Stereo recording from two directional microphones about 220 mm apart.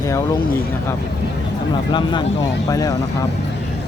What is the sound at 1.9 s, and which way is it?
Speech, 20° left (ahead or behind).